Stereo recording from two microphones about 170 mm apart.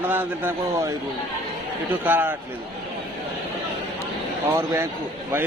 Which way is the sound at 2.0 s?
10° right (ahead or behind).